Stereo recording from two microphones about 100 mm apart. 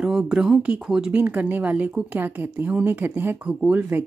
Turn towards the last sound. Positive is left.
turn(degrees=-20)  # may be behind; listen again after turning